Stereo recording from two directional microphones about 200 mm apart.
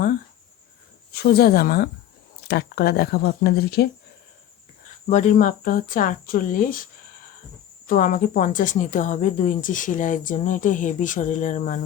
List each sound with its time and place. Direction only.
1.1 s speech: 50° left (ahead or behind)
5.0 s speech: 35° left (ahead or behind)
7.9 s speech: 45° left (ahead or behind)